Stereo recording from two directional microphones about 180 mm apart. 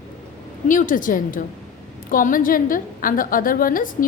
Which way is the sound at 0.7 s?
45° left (ahead or behind).